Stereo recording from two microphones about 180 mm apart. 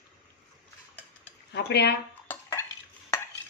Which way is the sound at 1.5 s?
70° left (ahead or behind).